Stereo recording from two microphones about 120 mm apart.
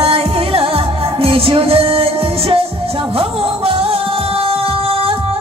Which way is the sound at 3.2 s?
50° right (ahead or behind).